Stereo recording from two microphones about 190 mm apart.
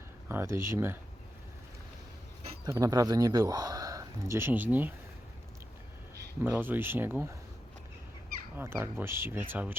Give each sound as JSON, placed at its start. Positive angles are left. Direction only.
{"t": 0.3, "sound": "speech", "side_deg": -15}
{"t": 2.6, "sound": "speech", "side_deg": -20}
{"t": 6.4, "sound": "speech", "side_deg": -10}
{"t": 8.5, "sound": "speech", "side_deg": -10}